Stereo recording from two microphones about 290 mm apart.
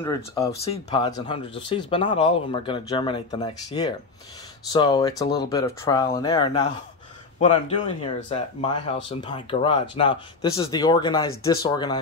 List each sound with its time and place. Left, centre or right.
0.0 s speech: centre